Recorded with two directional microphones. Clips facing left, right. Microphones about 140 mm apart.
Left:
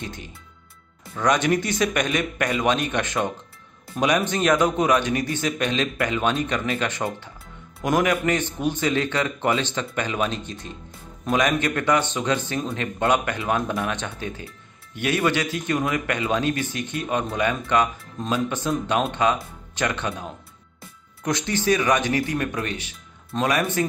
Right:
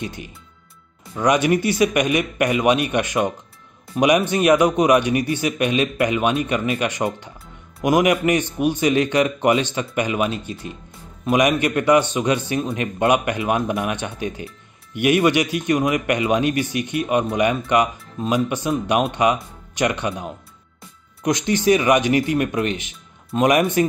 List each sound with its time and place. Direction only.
0.0 s a man's voice: 15° right (ahead or behind)